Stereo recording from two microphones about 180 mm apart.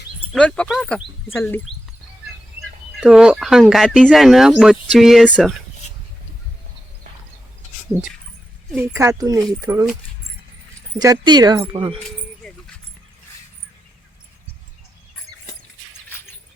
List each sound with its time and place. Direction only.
0.3 s speech: 5° left (ahead or behind)
3.0 s speech: 5° right (ahead or behind)
8.7 s speech: 15° right (ahead or behind)
10.9 s speech: 20° right (ahead or behind)